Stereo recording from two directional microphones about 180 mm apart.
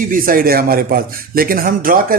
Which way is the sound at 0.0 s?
50° right (ahead or behind).